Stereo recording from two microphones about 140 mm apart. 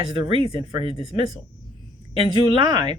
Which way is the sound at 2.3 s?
35° right (ahead or behind).